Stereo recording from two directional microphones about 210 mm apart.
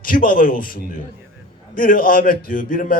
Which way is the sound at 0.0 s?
40° left (ahead or behind).